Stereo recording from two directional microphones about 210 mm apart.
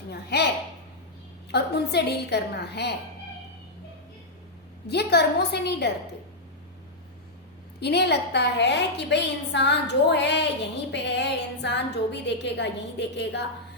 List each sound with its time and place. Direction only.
0.1 s a child's voice: 50° left (ahead or behind)
1.5 s a woman's voice: 50° left (ahead or behind)
4.9 s a woman's voice: 50° left (ahead or behind)
7.8 s a woman's voice: 50° left (ahead or behind)